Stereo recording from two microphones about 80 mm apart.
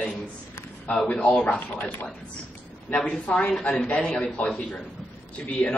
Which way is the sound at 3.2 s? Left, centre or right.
Centre.